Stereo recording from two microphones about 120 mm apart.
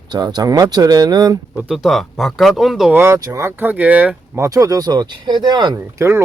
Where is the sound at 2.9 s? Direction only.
25° right (ahead or behind).